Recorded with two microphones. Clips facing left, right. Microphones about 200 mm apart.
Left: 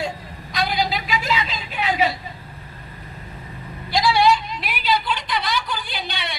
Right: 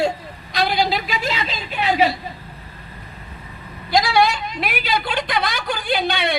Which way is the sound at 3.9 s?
45° right (ahead or behind).